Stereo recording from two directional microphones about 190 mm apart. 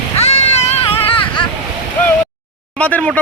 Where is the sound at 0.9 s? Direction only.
25° left (ahead or behind).